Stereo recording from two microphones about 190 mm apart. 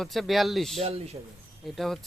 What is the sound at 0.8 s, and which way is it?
Speech, 30° right (ahead or behind).